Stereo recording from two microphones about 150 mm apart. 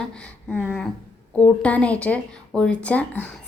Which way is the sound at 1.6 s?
10° left (ahead or behind).